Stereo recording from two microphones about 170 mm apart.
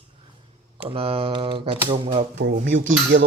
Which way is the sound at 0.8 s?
30° right (ahead or behind).